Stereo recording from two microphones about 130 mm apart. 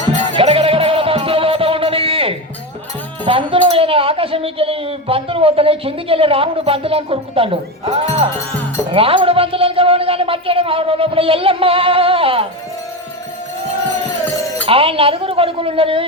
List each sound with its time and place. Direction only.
0.3 s a sound: 45° right (ahead or behind)
3.2 s speech: 45° right (ahead or behind)
14.6 s speech: 45° right (ahead or behind)